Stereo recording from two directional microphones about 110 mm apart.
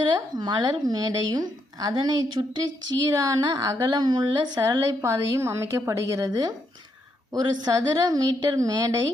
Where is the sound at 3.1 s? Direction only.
30° right (ahead or behind).